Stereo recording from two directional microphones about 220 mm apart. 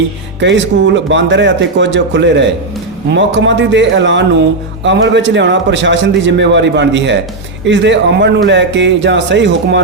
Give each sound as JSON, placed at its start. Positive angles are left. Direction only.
{"t": 0.3, "sound": "a man's voice", "side_deg": -55}